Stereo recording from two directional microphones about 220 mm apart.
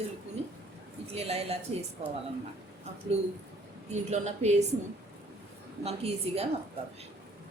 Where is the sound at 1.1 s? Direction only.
30° right (ahead or behind).